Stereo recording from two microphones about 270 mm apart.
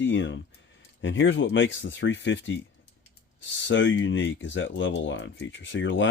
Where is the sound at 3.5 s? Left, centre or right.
Left.